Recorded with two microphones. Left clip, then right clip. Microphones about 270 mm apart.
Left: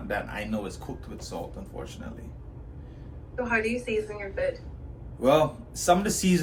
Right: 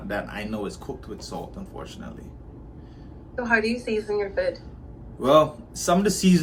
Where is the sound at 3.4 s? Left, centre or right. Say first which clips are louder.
Right 4 dB; right.